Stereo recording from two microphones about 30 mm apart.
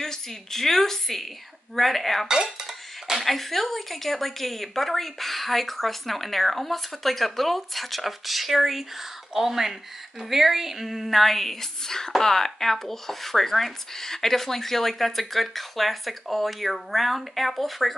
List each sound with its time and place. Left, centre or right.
0.0 s speech: centre
2.2 s cutlery: right
3.2 s speech: centre
11.1 s speech: centre